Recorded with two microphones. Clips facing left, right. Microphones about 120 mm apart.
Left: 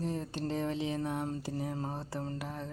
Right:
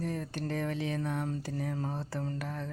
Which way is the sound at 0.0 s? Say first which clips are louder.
Even; 20° left (ahead or behind).